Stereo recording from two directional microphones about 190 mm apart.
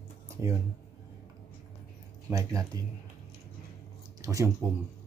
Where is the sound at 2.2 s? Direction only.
15° right (ahead or behind).